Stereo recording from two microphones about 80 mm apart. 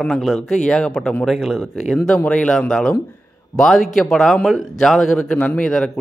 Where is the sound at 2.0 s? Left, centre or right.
Centre.